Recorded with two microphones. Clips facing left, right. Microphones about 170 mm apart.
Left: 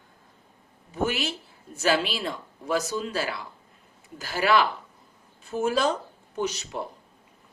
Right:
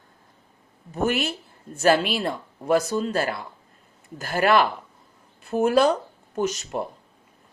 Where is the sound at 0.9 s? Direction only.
50° right (ahead or behind).